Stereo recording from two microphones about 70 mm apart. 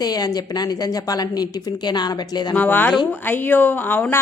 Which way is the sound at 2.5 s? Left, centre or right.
Left.